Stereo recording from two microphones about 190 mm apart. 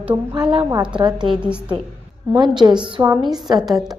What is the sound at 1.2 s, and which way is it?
Speech, 5° right (ahead or behind).